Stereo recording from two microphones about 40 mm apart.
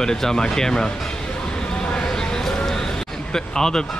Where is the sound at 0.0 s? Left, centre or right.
Centre.